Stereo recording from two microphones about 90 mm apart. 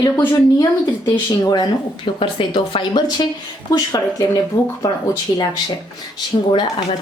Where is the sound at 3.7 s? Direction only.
35° left (ahead or behind).